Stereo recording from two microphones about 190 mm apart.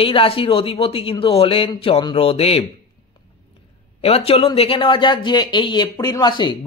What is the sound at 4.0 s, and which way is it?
Speech, 30° left (ahead or behind).